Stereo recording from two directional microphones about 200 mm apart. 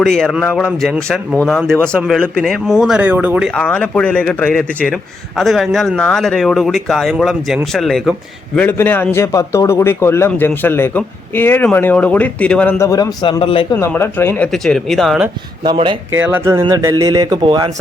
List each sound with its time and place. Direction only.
0.0 s speech: centre (ahead or behind)
3.5 s a man's voice: 5° left (ahead or behind); by 13.7 s 25° left (ahead or behind)
13.7 s speech: 10° left (ahead or behind)
15.6 s a man's voice: 20° right (ahead or behind)
16.1 s a man's voice: 10° right (ahead or behind)